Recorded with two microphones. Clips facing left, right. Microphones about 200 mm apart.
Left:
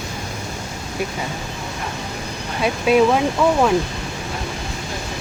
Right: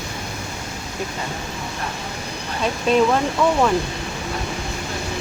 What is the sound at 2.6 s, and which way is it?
Speech, 10° left (ahead or behind).